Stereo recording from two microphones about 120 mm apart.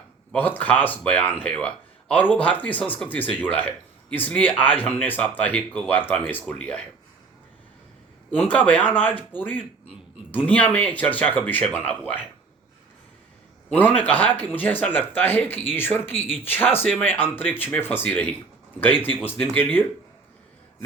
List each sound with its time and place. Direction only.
0.3 s speech: 15° left (ahead or behind)
8.4 s speech: 10° left (ahead or behind)
13.7 s speech: 15° left (ahead or behind)